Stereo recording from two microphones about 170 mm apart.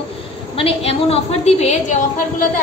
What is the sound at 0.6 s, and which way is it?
A woman's voice, 35° left (ahead or behind).